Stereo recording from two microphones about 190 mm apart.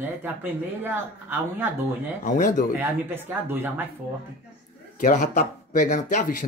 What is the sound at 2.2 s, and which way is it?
Speech, 40° left (ahead or behind).